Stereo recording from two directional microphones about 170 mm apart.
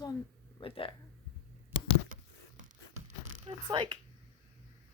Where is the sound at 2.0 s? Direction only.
50° right (ahead or behind).